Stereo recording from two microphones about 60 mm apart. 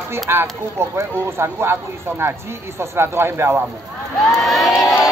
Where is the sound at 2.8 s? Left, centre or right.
Right.